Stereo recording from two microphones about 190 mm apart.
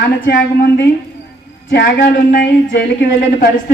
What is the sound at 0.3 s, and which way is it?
A woman's voice, 55° left (ahead or behind).